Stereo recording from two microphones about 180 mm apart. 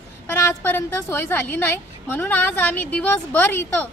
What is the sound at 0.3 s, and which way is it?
Speech, 10° left (ahead or behind).